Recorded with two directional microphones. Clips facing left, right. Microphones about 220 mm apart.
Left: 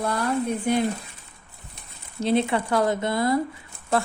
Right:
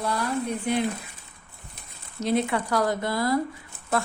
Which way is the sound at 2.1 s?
30° left (ahead or behind).